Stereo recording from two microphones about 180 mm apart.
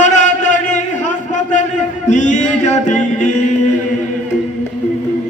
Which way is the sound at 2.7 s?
40° left (ahead or behind).